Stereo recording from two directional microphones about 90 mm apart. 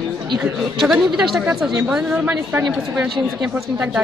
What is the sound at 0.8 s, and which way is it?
A woman's voice, 5° right (ahead or behind).